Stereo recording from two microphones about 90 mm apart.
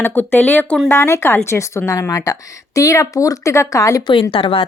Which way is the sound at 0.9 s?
30° left (ahead or behind).